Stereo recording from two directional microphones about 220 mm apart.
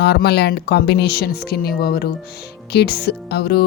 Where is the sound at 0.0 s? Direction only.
50° left (ahead or behind).